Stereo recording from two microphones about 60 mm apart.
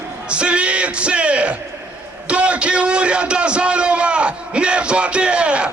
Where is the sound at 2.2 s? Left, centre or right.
Centre.